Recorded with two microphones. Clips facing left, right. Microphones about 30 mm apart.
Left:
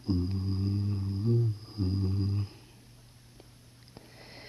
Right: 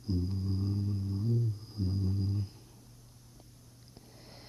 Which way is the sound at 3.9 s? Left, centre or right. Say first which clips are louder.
Left 5 dB; left.